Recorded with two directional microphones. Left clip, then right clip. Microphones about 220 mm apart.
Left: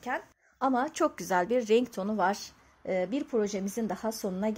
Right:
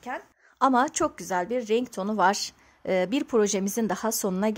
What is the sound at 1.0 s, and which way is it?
A woman's voice, centre (ahead or behind).